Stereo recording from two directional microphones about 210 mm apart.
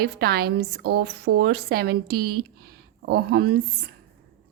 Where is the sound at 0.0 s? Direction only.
50° right (ahead or behind).